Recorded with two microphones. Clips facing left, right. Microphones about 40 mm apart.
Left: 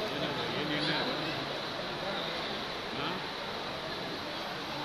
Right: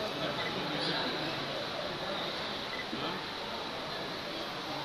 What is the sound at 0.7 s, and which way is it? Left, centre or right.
Chatter, left.